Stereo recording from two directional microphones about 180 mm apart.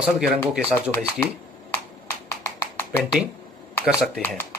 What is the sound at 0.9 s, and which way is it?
Speech, 15° left (ahead or behind).